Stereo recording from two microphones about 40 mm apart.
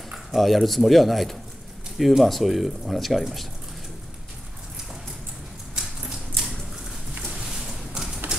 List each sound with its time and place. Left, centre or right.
0.3 s speech: centre
5.8 s typewriter: centre
7.4 s a sound: centre